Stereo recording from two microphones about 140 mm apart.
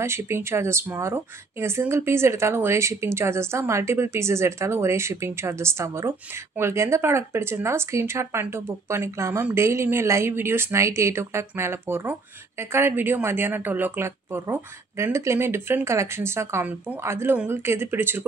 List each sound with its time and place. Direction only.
0.0 s speech: 20° right (ahead or behind)